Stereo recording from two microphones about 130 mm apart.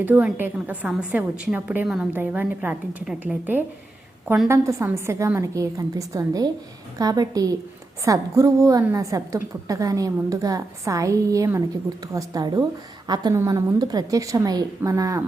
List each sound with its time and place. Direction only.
0.0 s a woman's voice: 10° right (ahead or behind)
4.4 s a woman's voice: 20° right (ahead or behind)